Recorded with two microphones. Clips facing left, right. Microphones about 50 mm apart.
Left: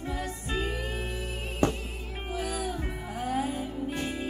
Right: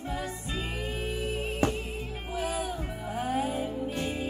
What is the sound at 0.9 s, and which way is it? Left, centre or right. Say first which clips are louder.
Music: right 3 dB; right.